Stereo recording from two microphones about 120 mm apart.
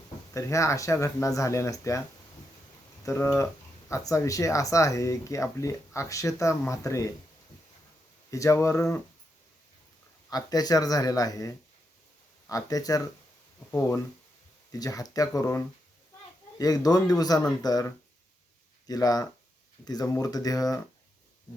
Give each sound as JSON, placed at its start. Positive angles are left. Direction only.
{"t": 0.3, "sound": "speech", "side_deg": 25}
{"t": 8.3, "sound": "speech", "side_deg": 25}
{"t": 10.2, "sound": "speech", "side_deg": 30}